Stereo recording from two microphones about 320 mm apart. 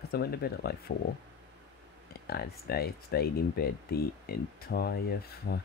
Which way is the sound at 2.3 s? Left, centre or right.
Left.